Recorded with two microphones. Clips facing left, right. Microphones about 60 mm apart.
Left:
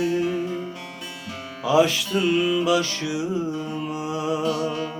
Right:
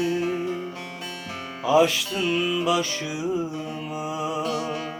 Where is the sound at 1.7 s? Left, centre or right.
Centre.